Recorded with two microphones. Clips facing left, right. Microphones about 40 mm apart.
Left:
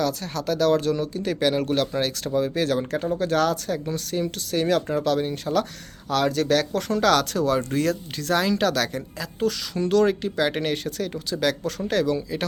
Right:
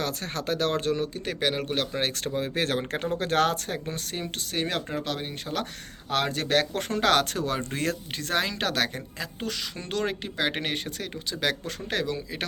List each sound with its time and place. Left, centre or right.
0.0 s speech: right; by 2.0 s centre
2.0 s speech: right
4.6 s speech: centre